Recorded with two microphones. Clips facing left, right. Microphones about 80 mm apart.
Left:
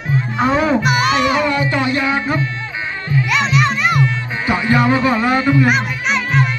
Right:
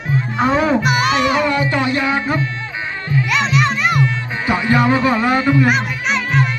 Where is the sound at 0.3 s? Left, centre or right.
Right.